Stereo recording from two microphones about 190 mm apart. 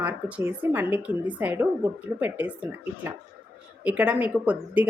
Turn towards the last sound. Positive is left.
turn(degrees=-10)  # may be behind; listen again after turning